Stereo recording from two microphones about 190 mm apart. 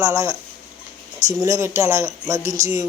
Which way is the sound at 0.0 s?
15° right (ahead or behind).